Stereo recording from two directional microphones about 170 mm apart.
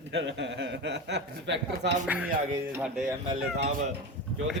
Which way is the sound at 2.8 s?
Centre (ahead or behind).